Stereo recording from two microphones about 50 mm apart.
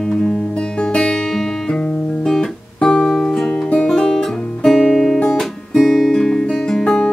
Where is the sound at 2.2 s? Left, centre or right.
Centre.